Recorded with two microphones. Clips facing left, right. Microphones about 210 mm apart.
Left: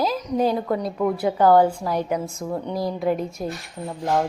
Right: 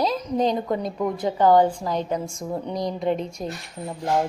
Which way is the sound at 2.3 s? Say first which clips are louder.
Left 1 dB; 10° right (ahead or behind).